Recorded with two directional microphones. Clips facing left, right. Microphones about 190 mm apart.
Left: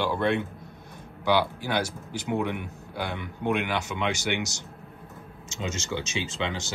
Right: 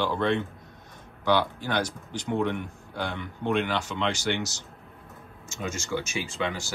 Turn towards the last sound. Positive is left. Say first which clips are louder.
# right 1 dB
turn(degrees=20)  # may be behind; listen again after turning